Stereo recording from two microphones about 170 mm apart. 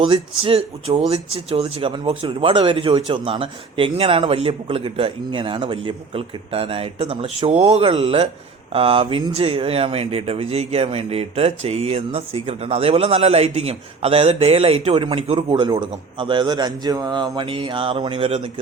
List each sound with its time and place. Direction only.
0.0 s speech: 30° right (ahead or behind)